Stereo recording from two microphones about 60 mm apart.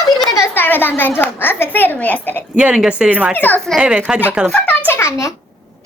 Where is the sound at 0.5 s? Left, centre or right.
Left.